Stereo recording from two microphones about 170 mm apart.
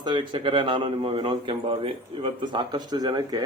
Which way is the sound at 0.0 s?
30° right (ahead or behind).